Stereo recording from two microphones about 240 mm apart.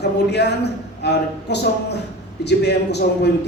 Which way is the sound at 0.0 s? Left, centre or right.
Left.